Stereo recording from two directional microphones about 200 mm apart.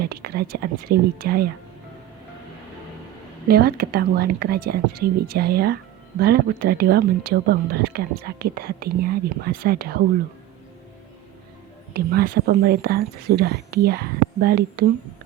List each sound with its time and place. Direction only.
0.1 s speech: 50° right (ahead or behind)
3.5 s speech: 50° right (ahead or behind)
11.9 s speech: 50° right (ahead or behind)